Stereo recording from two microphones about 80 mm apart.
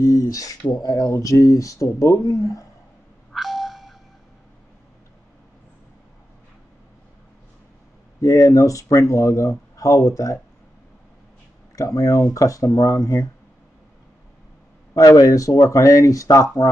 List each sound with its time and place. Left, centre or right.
0.0 s speech: left
3.3 s a sound: centre
8.2 s speech: left
11.7 s speech: left
15.0 s speech: left